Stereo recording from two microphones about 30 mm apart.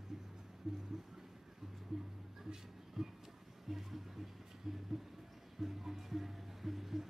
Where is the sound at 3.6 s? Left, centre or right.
Centre.